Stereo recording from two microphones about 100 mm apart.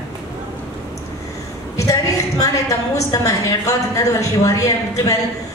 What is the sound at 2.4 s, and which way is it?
A woman's voice, 35° left (ahead or behind).